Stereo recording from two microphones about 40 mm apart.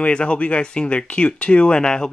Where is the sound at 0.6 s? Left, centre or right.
Left.